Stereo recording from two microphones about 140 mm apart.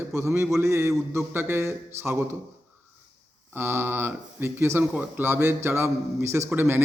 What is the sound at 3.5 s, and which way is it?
Speech, 15° right (ahead or behind).